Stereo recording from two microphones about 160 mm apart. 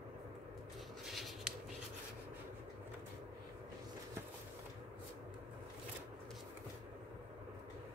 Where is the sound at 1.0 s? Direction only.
Centre (ahead or behind).